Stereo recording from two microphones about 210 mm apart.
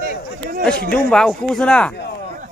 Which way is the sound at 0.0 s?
45° right (ahead or behind).